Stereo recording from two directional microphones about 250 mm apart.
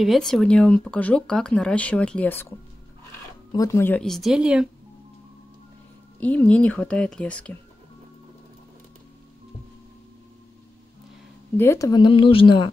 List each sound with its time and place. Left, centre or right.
0.0 s speech: centre
3.5 s speech: centre
6.1 s speech: centre
11.5 s a woman's voice: centre